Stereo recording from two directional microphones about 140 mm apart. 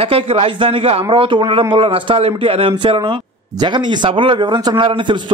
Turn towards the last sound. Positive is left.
turn(degrees=-35)  # may be behind; listen again after turning